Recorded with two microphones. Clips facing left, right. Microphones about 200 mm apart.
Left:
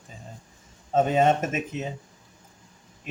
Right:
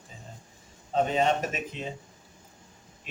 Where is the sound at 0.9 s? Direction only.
45° left (ahead or behind).